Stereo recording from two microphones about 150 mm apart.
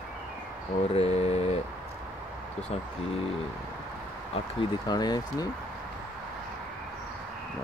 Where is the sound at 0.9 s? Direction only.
40° left (ahead or behind).